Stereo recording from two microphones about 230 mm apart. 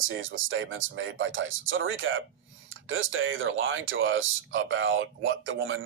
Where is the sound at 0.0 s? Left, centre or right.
Right.